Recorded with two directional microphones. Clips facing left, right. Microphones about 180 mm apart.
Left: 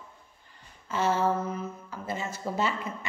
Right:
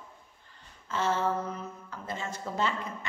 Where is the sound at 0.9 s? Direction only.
10° left (ahead or behind).